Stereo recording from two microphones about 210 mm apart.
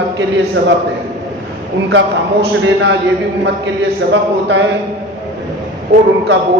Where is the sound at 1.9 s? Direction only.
60° right (ahead or behind).